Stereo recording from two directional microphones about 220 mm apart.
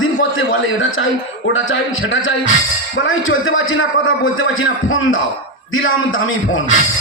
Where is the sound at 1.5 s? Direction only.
60° left (ahead or behind).